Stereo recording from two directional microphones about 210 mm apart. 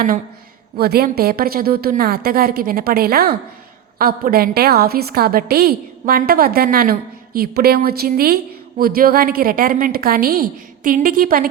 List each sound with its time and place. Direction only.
0.8 s a woman's voice: 50° right (ahead or behind)